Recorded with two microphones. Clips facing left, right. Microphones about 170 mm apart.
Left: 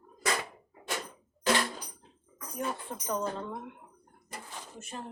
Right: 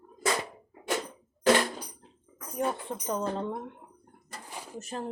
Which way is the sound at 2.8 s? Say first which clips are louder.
Right 2 dB; 25° right (ahead or behind).